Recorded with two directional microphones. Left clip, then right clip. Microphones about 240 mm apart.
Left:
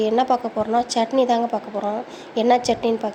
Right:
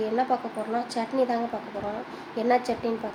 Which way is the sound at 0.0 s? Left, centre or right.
Left.